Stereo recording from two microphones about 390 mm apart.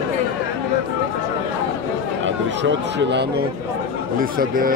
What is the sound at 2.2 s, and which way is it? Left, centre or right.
Speech, right.